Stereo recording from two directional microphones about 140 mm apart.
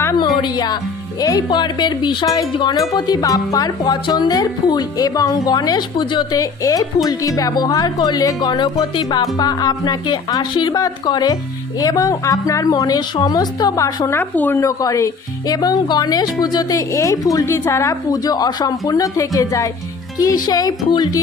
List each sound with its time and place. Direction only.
0.4 s speech: 30° left (ahead or behind)